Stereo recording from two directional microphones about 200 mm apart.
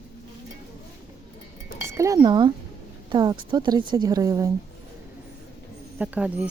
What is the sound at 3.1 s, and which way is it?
A woman's voice, 20° right (ahead or behind).